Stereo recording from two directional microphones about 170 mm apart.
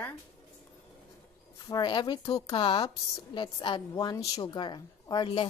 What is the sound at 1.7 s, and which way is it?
Speech, 25° left (ahead or behind).